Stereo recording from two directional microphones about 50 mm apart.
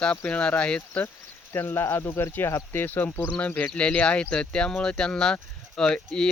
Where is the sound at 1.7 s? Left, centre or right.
Left.